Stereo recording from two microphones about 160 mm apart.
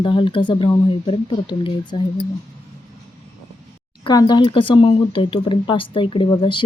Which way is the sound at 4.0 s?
25° left (ahead or behind).